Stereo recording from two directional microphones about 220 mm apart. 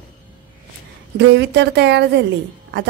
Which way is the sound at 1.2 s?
55° right (ahead or behind).